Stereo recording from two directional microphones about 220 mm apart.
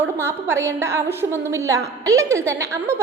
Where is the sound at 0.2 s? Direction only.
10° right (ahead or behind).